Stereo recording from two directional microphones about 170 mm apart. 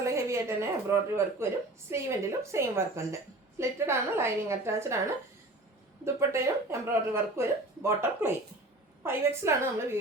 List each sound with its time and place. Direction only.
0.0 s a woman's voice: 15° right (ahead or behind)
6.1 s speech: 15° right (ahead or behind)